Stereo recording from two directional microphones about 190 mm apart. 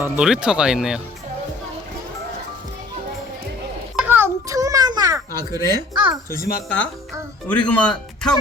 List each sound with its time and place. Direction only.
0.0 s speech: 5° right (ahead or behind)
3.9 s a sound: 10° right (ahead or behind)
5.5 s a child's voice: 25° right (ahead or behind)
6.3 s speech: 50° left (ahead or behind)
7.4 s speech: 5° left (ahead or behind)